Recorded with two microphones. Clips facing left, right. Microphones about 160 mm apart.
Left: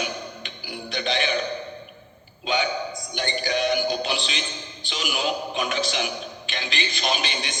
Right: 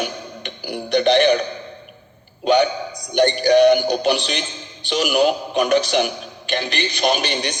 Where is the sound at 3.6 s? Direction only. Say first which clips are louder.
Right 9 dB; 65° right (ahead or behind).